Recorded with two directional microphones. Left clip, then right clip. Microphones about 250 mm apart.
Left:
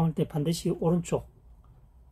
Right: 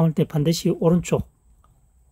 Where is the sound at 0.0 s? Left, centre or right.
Right.